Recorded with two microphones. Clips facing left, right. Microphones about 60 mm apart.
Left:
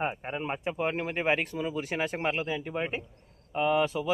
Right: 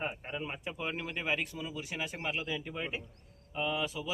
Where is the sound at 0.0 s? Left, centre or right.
Left.